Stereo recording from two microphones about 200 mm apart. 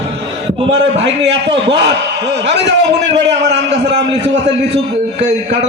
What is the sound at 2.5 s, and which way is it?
Speech, 60° right (ahead or behind).